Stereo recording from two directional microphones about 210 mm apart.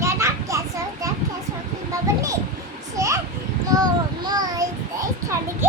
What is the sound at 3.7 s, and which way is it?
Child singing, 20° right (ahead or behind).